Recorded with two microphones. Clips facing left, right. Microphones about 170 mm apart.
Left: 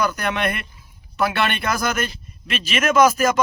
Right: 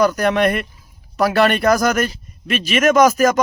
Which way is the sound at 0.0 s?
35° right (ahead or behind).